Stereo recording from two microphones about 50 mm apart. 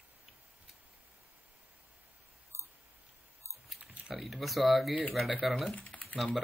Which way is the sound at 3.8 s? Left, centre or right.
Centre.